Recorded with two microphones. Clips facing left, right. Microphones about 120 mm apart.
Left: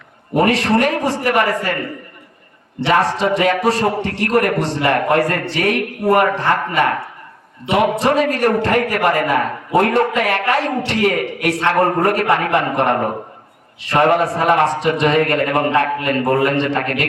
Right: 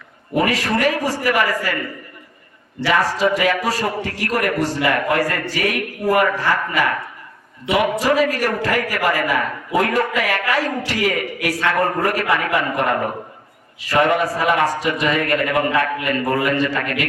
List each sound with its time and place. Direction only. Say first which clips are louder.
0.3 s a man's voice: left 4 dB; 30° left (ahead or behind)
7.9 s a man's voice: left 1 dB; 30° left (ahead or behind)
14.0 s a man's voice: left 3 dB; 40° left (ahead or behind)